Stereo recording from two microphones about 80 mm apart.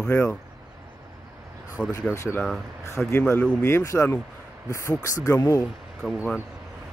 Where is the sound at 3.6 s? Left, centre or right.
Left.